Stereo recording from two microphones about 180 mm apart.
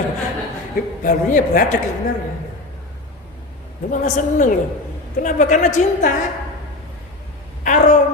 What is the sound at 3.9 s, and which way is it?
A man's voice, 45° left (ahead or behind).